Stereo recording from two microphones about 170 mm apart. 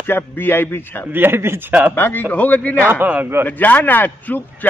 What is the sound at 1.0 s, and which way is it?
Speech, 10° right (ahead or behind).